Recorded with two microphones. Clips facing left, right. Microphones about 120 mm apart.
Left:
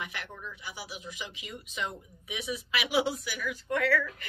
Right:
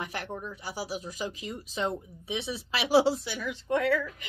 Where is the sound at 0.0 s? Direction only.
40° right (ahead or behind).